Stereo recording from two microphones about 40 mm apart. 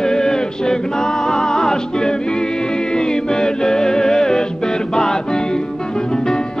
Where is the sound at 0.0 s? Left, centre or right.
Centre.